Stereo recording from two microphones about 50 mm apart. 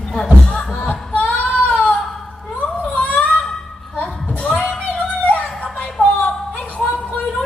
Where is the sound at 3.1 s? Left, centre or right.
Centre.